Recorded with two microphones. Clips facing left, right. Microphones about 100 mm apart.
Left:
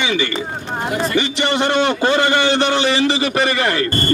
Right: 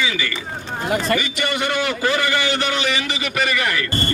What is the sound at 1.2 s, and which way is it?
A man's voice, 25° left (ahead or behind).